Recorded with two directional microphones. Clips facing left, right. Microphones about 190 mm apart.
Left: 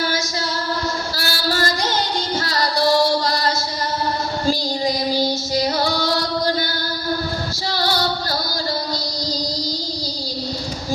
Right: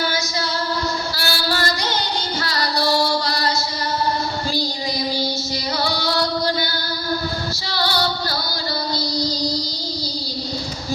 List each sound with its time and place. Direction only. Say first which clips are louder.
1.1 s female singing: left 1 dB; 45° left (ahead or behind)
5.5 s music: left 6 dB; 50° left (ahead or behind)
7.8 s music: even; 45° left (ahead or behind)